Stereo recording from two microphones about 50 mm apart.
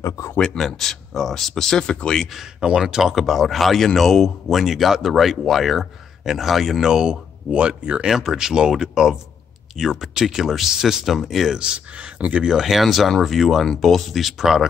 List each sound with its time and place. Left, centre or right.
0.0 s speech: left
0.6 s speech: centre
2.3 s speech: centre
6.9 s speech: centre
8.1 s speech: centre
11.6 s speech: right
12.4 s speech: centre